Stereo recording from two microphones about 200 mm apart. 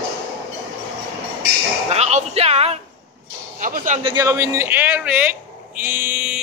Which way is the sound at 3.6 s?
40° right (ahead or behind).